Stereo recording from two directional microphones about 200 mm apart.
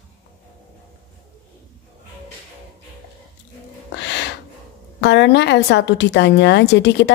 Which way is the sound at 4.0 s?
60° left (ahead or behind).